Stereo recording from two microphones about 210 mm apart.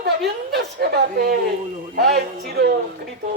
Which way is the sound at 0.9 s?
45° right (ahead or behind).